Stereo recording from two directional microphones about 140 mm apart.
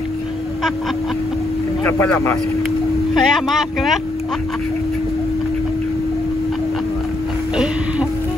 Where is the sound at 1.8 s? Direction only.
15° left (ahead or behind).